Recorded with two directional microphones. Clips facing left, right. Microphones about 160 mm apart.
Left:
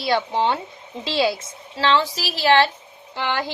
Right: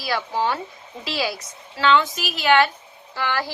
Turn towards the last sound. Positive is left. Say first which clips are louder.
# left 1 dB
turn(degrees=20)  # may be behind; listen again after turning